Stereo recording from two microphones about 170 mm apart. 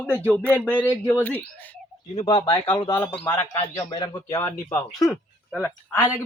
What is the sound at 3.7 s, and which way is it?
Speech, 15° left (ahead or behind).